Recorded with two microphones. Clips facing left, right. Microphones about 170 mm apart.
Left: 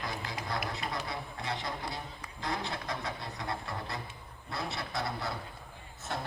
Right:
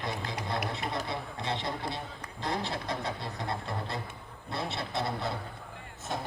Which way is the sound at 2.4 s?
30° right (ahead or behind).